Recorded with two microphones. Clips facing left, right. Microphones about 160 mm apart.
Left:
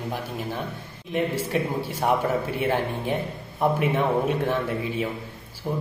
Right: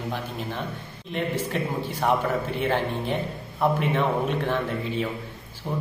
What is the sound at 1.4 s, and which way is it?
A man's voice, 10° left (ahead or behind).